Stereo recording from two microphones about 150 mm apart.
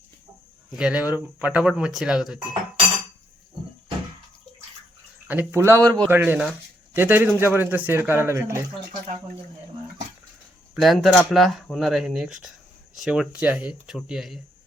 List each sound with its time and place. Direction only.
0.8 s speech: 5° right (ahead or behind)
5.3 s a man's voice: 15° right (ahead or behind)
10.8 s speech: centre (ahead or behind)